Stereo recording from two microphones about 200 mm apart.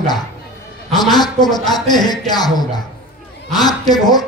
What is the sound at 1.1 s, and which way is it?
A man's voice, 20° left (ahead or behind).